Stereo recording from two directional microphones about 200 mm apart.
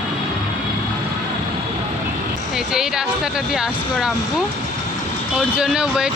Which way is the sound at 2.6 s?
5° right (ahead or behind).